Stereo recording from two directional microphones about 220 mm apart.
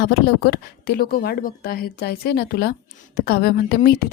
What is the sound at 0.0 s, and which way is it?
A woman's voice, 45° left (ahead or behind).